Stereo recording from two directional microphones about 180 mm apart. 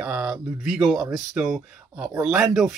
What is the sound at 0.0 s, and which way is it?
Speech, 5° right (ahead or behind).